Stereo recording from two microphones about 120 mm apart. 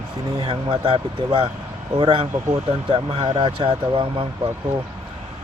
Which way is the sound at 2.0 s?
40° right (ahead or behind).